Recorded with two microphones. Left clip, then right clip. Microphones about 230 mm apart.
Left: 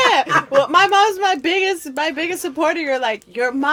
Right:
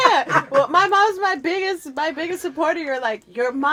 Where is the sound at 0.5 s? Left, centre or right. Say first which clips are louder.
Left 3 dB; left.